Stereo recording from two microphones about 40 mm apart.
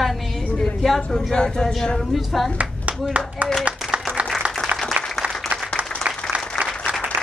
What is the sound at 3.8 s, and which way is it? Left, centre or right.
Clapping, centre.